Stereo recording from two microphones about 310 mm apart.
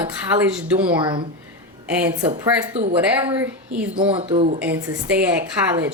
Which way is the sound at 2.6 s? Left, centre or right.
Centre.